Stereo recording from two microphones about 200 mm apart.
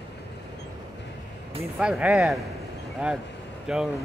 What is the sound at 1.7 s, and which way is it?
Speech, 5° right (ahead or behind).